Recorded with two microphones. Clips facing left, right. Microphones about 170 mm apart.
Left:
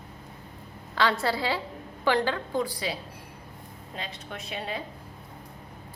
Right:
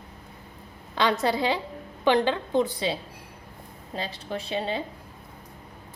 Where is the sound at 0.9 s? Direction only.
20° right (ahead or behind).